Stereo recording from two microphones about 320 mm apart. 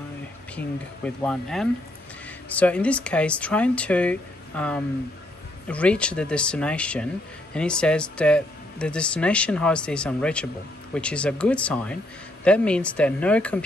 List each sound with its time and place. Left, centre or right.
0.6 s speech: centre